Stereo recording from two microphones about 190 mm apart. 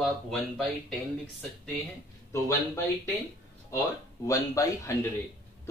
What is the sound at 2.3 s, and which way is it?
Speech, 15° left (ahead or behind).